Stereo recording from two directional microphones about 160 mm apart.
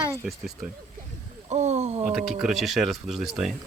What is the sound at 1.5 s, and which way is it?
Speech, 45° right (ahead or behind).